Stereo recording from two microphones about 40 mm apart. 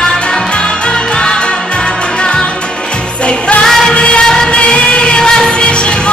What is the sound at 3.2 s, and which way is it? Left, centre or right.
Music, left.